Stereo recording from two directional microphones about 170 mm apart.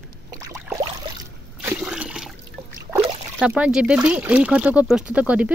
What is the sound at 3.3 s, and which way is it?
Speech, 5° right (ahead or behind).